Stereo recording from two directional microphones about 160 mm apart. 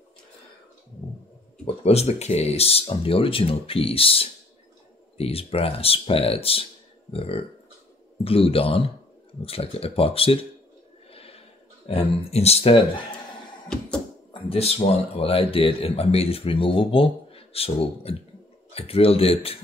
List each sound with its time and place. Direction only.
1.8 s speech: 40° left (ahead or behind)
11.1 s a sound: 35° left (ahead or behind)
11.9 s speech: 40° left (ahead or behind)
15.1 s speech: 35° left (ahead or behind)